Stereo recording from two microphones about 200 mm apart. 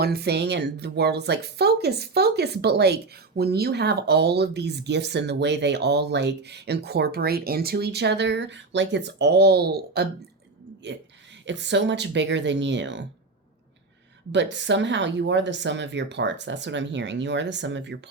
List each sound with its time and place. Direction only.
0.0 s speech: 55° right (ahead or behind)
11.4 s speech: 60° right (ahead or behind)
14.3 s speech: 65° right (ahead or behind)